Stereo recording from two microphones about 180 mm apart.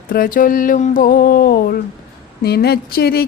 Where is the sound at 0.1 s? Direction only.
50° left (ahead or behind).